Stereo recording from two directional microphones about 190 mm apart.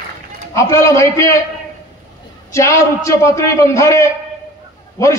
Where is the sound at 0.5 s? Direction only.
15° left (ahead or behind).